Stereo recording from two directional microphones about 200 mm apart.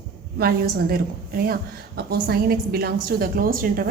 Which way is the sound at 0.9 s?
50° right (ahead or behind).